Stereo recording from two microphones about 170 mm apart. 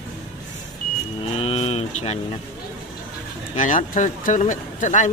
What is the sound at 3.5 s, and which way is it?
Speech, 45° left (ahead or behind).